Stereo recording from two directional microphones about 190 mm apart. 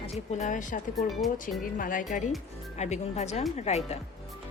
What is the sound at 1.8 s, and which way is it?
A woman's voice, 45° left (ahead or behind).